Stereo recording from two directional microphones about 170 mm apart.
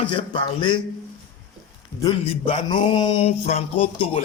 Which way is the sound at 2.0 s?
30° left (ahead or behind).